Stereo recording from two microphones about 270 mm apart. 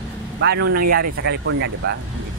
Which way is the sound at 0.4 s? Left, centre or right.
Right.